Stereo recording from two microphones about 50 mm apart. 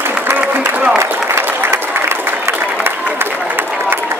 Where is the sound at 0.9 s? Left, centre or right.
Right.